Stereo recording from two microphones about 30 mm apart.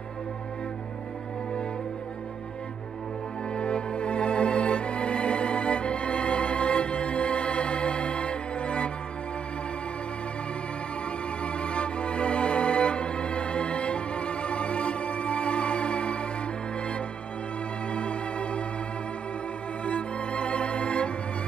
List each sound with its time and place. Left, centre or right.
3.5 s music: left
11.4 s music: left
17.9 s music: left
19.8 s music: left